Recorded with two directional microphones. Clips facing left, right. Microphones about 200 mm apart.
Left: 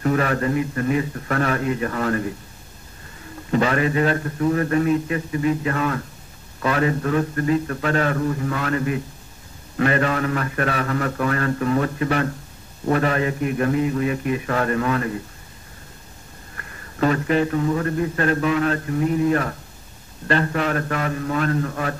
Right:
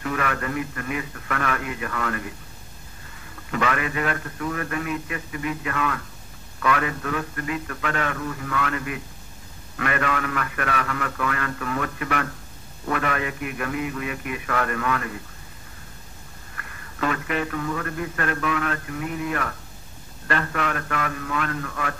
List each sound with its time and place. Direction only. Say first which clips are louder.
0.0 s a man's voice: left 7 dB; 35° left (ahead or behind)
3.5 s a man's voice: left 6 dB; 30° left (ahead or behind)
16.5 s a man's voice: left 6 dB; 35° left (ahead or behind)